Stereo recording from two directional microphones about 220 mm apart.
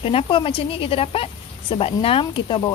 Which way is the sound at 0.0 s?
25° left (ahead or behind).